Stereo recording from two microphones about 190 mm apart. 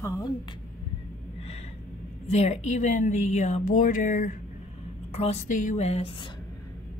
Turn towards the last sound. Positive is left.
turn(degrees=30)  # may be behind; listen again after turning